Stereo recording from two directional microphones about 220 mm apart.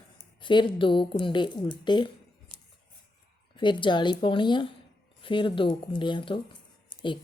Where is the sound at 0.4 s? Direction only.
20° left (ahead or behind).